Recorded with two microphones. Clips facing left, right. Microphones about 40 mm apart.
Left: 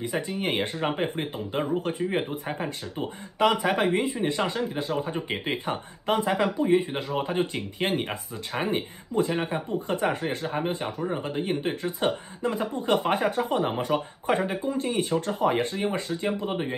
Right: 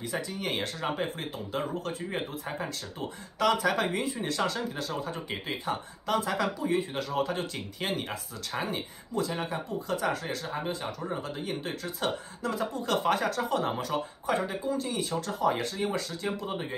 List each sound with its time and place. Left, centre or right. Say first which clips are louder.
0.0 s speech: left 5 dB; left